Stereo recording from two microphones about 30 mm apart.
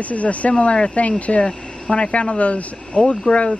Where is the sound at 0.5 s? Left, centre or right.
Left.